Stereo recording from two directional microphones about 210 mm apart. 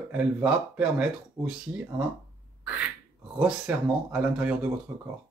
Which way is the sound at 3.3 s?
5° right (ahead or behind).